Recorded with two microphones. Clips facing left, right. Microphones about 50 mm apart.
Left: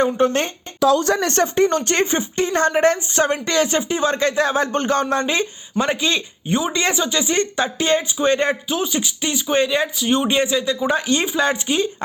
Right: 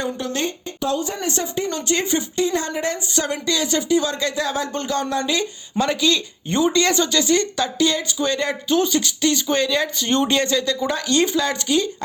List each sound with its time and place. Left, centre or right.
0.0 s speech: left
0.8 s speech: left
3.1 s a woman's voice: left
6.5 s a woman's voice: centre; by 8.5 s left
8.7 s a woman's voice: centre
9.9 s a woman's voice: centre; by 11.9 s left